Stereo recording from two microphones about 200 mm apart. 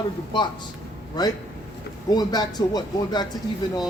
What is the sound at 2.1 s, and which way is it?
A man's voice, 20° left (ahead or behind).